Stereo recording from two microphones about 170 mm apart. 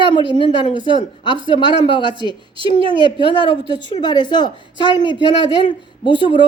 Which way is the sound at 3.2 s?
30° left (ahead or behind).